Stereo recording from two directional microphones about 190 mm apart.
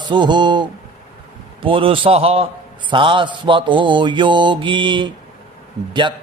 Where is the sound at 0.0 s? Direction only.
25° right (ahead or behind).